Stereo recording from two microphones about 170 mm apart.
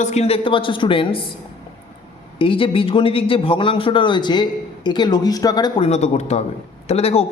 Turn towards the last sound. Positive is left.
turn(degrees=35)  # may be behind; listen again after turning